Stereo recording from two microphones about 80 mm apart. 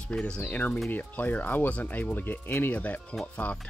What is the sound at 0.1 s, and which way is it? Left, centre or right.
Speech, centre.